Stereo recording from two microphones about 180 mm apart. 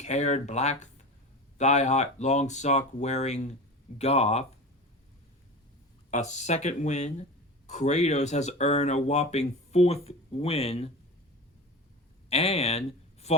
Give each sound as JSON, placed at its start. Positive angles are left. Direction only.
{"t": 0.0, "sound": "speech", "side_deg": 40}
{"t": 6.1, "sound": "speech", "side_deg": 40}
{"t": 12.3, "sound": "speech", "side_deg": 35}